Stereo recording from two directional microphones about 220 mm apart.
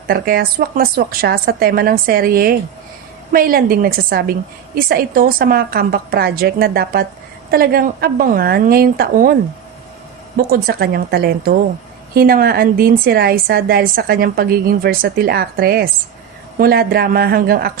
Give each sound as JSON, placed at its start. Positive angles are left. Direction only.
{"t": 0.1, "sound": "a woman's voice", "side_deg": -45}